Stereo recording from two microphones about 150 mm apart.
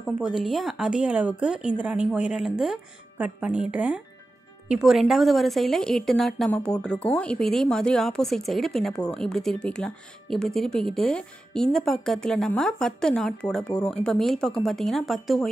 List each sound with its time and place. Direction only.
0.2 s speech: centre (ahead or behind)